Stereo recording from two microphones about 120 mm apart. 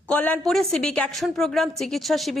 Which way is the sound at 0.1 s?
15° left (ahead or behind).